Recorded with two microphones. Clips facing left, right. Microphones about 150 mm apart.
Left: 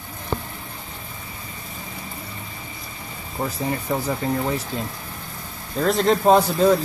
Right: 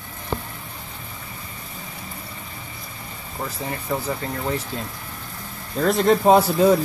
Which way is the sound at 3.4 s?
20° left (ahead or behind).